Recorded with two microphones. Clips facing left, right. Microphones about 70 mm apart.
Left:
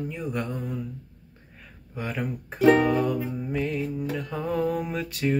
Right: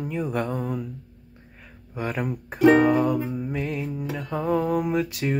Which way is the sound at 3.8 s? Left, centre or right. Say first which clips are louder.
Even; centre.